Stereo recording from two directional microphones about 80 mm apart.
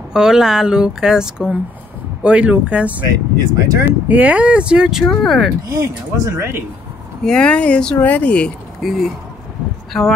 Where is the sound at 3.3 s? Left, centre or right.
Right.